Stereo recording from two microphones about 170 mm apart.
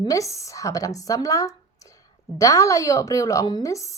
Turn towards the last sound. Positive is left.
turn(degrees=20)  # may be behind; listen again after turning